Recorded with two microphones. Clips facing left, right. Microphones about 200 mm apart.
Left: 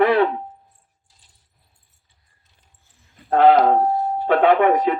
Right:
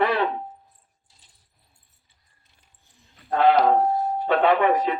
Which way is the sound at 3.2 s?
55° left (ahead or behind).